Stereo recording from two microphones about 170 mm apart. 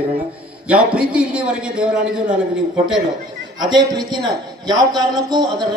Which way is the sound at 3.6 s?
25° right (ahead or behind).